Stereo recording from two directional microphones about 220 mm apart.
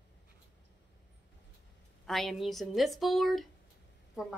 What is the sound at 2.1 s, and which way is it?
Speech, centre (ahead or behind).